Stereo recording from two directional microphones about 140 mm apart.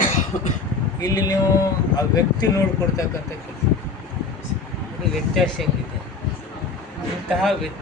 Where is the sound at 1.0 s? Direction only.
25° left (ahead or behind).